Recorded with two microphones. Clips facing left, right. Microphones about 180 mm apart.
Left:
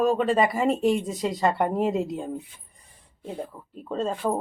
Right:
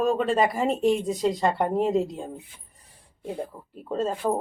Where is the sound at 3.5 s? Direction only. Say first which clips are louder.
Right 1 dB; 25° right (ahead or behind).